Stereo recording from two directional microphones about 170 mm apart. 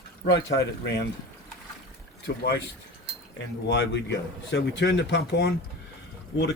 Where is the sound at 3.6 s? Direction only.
90° left; by 5.5 s 70° left (ahead or behind).